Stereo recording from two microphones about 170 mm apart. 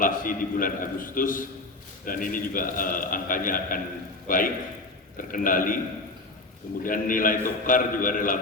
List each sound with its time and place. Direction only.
0.0 s a man's voice: 55° left (ahead or behind)
6.8 s a man's voice: 55° left (ahead or behind)